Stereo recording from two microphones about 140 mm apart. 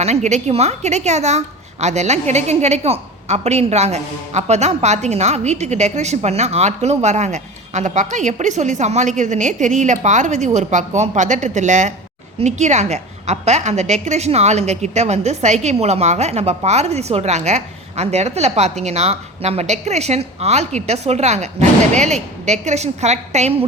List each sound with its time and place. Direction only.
0.0 s a woman's voice: 55° right (ahead or behind)